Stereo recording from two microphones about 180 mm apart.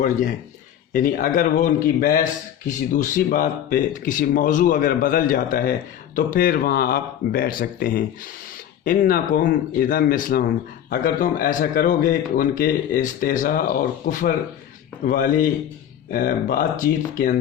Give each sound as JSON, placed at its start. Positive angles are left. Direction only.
{"t": 0.0, "sound": "speech", "side_deg": 45}